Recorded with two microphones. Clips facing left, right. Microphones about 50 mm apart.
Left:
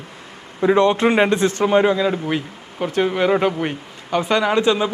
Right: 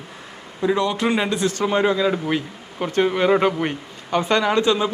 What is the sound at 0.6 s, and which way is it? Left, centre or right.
Speech, left.